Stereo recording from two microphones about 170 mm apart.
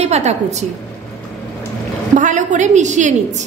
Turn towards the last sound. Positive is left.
turn(degrees=-45)  # may be behind; listen again after turning